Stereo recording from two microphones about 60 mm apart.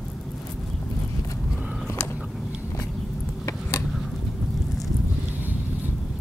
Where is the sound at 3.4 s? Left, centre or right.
Left.